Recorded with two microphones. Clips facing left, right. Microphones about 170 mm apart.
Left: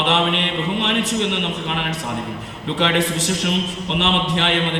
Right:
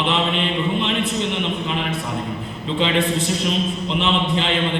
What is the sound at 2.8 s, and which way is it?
A man's voice, 85° left.